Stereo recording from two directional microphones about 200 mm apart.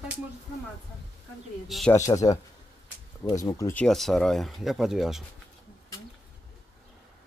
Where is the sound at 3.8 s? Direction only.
Centre (ahead or behind).